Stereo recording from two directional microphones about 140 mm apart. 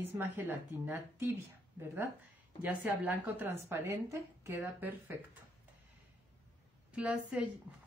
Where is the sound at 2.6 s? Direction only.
10° right (ahead or behind).